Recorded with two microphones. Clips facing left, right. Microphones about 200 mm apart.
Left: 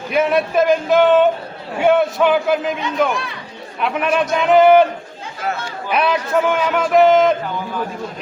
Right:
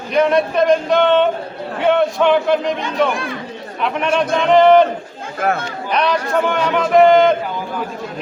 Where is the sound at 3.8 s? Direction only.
5° left (ahead or behind).